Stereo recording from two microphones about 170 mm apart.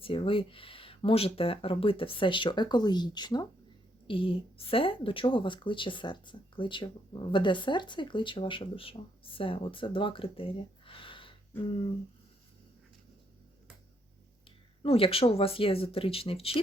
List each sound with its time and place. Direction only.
0.0 s a woman's voice: 30° left (ahead or behind)
14.8 s speech: 35° left (ahead or behind)